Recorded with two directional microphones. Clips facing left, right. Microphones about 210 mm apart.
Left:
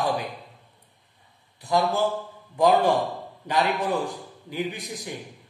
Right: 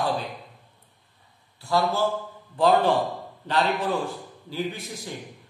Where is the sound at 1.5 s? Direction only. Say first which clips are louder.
Left 1 dB; 20° left (ahead or behind).